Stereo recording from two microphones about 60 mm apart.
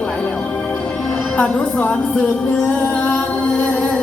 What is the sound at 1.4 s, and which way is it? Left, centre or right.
Speech, left.